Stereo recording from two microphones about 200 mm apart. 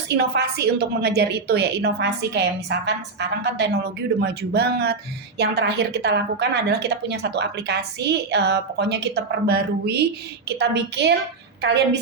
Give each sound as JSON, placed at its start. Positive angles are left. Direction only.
{"t": 0.1, "sound": "a woman's voice", "side_deg": -55}